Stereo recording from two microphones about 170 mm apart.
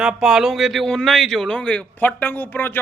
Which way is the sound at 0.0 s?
5° right (ahead or behind).